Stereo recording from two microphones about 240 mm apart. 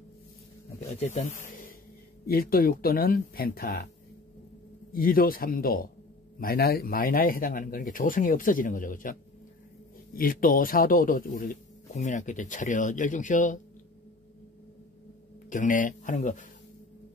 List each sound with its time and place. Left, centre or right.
1.1 s speech: left
4.9 s speech: left
10.1 s speech: left
15.5 s speech: left